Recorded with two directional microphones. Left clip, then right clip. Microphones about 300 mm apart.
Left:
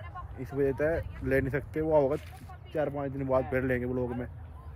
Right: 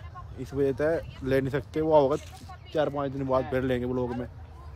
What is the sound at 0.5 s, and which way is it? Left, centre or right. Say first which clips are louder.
Speech: right 2 dB; centre.